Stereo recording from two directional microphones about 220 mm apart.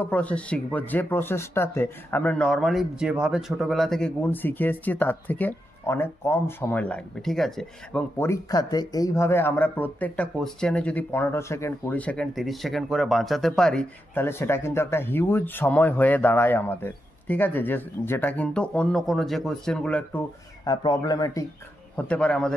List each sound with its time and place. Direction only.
0.0 s speech: 5° left (ahead or behind)
20.6 s speech: 20° left (ahead or behind)
21.9 s a man's voice: 5° left (ahead or behind)